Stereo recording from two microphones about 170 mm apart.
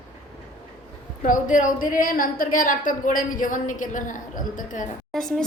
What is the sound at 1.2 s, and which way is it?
A woman's voice, 50° left (ahead or behind).